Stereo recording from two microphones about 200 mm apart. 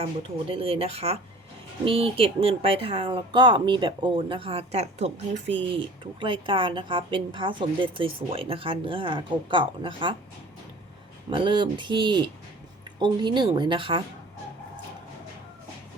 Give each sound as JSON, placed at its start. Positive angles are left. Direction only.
{"t": 0.0, "sound": "a woman's voice", "side_deg": -25}
{"t": 11.3, "sound": "a woman's voice", "side_deg": -25}